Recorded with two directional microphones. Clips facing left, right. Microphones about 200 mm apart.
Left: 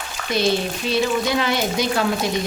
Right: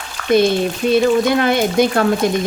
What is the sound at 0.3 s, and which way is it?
A woman's voice, 50° right (ahead or behind).